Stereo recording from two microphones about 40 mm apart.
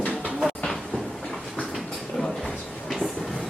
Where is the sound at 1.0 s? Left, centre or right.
Centre.